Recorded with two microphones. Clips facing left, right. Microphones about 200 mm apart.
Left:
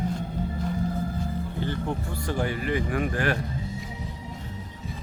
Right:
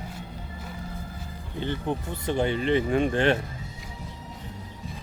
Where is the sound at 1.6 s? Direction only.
20° right (ahead or behind).